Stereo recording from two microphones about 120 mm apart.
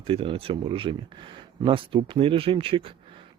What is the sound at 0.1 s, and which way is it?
Speech, 50° right (ahead or behind).